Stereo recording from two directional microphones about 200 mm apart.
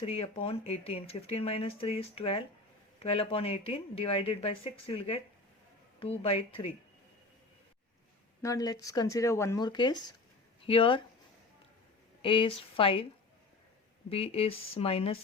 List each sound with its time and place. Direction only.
0.0 s speech: 30° left (ahead or behind)
8.4 s speech: 15° left (ahead or behind)
12.2 s speech: 25° left (ahead or behind)
14.1 s speech: 30° left (ahead or behind)